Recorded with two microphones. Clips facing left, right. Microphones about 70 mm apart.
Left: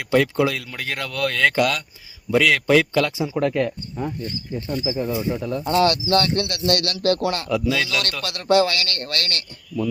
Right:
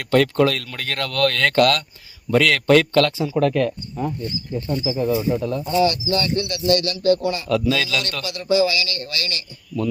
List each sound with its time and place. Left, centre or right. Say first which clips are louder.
0.1 s speech: right 2 dB; centre; by 5.6 s left
5.6 s a man's voice: left 2 dB; left
7.5 s a man's voice: right 4 dB; centre
8.2 s a man's voice: left 1 dB; left